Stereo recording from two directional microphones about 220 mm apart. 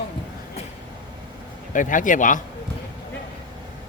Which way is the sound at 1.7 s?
35° left (ahead or behind).